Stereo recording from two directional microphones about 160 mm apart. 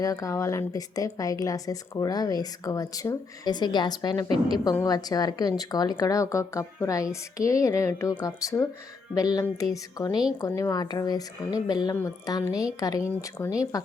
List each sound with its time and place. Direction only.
0.0 s a woman's voice: 20° left (ahead or behind)